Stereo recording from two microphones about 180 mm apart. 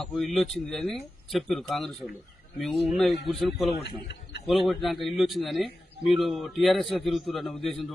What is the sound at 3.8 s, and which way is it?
Speech, 70° left (ahead or behind).